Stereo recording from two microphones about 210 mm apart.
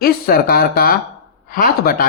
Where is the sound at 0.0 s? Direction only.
45° left (ahead or behind).